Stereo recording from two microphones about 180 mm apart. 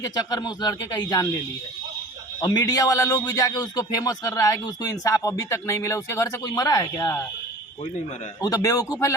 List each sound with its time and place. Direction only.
0.0 s speech: 20° left (ahead or behind)
2.4 s speech: 20° left (ahead or behind)
8.4 s speech: 20° left (ahead or behind)